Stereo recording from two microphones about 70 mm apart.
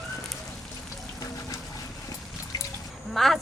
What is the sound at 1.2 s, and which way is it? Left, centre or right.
Water, left.